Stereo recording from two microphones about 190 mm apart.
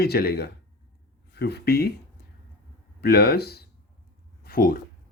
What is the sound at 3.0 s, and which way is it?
Speech, 55° left (ahead or behind).